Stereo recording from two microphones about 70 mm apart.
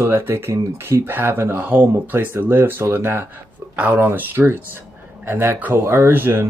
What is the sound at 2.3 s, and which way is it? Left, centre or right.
Speech, right.